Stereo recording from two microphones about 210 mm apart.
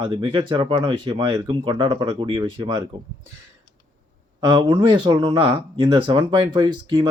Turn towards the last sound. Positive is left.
turn(degrees=-20)  # may be behind; listen again after turning